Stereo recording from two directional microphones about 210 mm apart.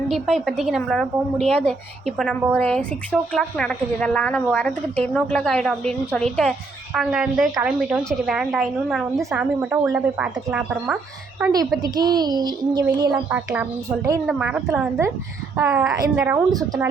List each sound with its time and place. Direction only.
0.1 s a woman's voice: centre (ahead or behind)
11.8 s speech: 20° right (ahead or behind)
13.3 s a woman's voice: 5° right (ahead or behind)